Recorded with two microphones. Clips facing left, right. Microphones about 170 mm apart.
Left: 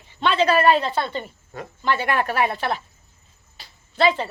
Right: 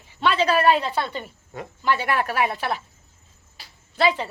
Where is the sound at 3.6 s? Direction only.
10° right (ahead or behind).